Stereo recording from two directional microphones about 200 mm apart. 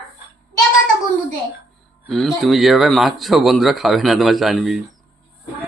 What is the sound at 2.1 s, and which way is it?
Speech, centre (ahead or behind).